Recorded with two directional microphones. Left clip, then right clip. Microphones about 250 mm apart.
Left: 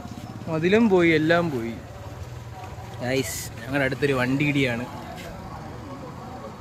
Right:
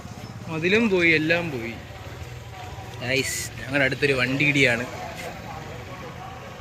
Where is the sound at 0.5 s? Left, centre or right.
Centre.